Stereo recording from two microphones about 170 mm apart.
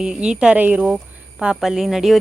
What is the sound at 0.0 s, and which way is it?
Speech, 5° right (ahead or behind).